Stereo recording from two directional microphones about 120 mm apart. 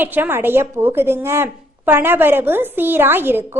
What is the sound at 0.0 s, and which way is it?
A woman's voice, 15° right (ahead or behind).